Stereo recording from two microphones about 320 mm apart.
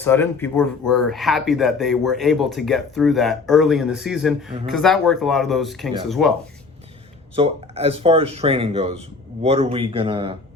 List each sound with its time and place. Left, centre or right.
0.0 s speech: centre
7.3 s speech: centre